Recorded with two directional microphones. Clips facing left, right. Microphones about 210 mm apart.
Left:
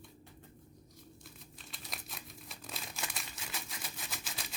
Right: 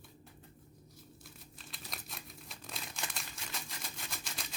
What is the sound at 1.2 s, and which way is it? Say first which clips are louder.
Crumpling: left 1 dB; centre (ahead or behind).